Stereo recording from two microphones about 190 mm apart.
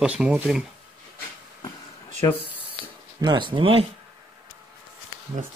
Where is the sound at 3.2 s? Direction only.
25° right (ahead or behind).